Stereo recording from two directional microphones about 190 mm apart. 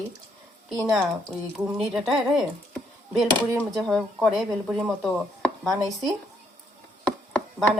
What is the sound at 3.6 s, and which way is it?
Speech, centre (ahead or behind).